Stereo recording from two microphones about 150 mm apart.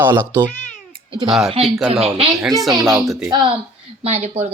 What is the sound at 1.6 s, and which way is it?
Speech, centre (ahead or behind).